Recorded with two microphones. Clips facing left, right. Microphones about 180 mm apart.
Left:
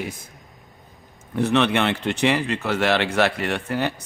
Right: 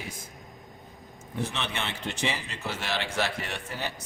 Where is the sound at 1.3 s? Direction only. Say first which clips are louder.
Left 13 dB; 65° left (ahead or behind).